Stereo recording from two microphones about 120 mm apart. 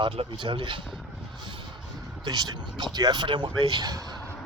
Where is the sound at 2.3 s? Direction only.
35° right (ahead or behind).